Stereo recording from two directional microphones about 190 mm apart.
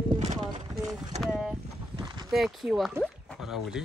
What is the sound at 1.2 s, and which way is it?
Speech, 5° right (ahead or behind).